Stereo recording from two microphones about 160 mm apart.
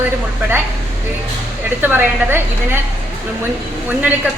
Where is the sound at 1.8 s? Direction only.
10° right (ahead or behind).